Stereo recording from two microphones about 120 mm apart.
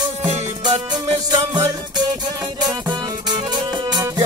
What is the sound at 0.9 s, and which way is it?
Music, 35° right (ahead or behind).